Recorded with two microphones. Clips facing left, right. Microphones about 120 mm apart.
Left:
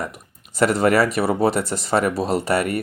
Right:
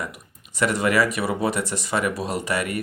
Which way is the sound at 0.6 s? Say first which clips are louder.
Left 4 dB; 35° left (ahead or behind).